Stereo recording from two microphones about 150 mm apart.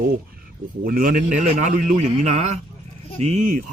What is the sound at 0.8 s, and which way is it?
A man's voice, 70° right (ahead or behind).